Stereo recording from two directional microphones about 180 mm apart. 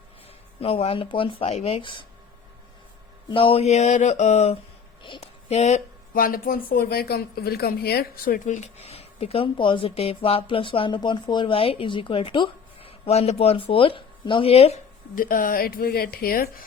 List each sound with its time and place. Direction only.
0.6 s speech: 30° left (ahead or behind)
3.2 s speech: 30° left (ahead or behind)
15.1 s a woman's voice: 50° left (ahead or behind)